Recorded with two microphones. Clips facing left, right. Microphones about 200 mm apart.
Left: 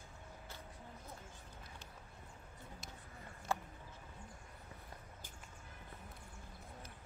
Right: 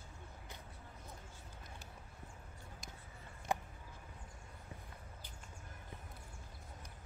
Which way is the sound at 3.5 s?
15° right (ahead or behind).